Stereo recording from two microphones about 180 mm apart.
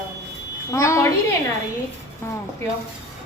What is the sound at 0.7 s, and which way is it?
Speech, 15° left (ahead or behind).